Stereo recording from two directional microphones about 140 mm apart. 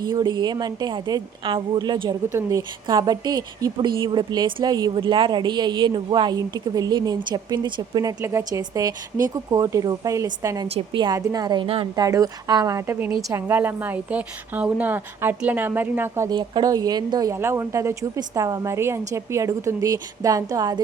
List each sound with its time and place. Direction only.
0.0 s a woman's voice: 30° right (ahead or behind)
12.0 s a woman's voice: 25° right (ahead or behind)
16.3 s speech: 30° right (ahead or behind)